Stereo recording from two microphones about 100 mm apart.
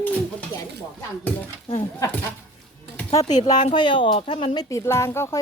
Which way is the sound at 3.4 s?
50° left (ahead or behind).